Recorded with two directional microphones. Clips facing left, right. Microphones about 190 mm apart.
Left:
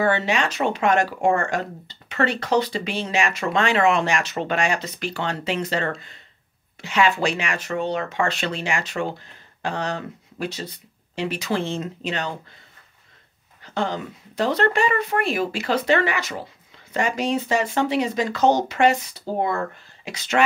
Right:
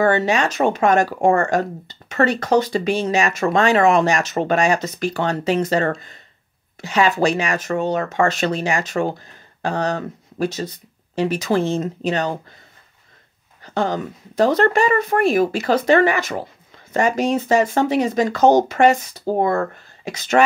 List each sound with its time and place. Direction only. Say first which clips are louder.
0.0 s speech: right 4 dB; 45° right (ahead or behind)
13.7 s speech: right 4 dB; 45° right (ahead or behind)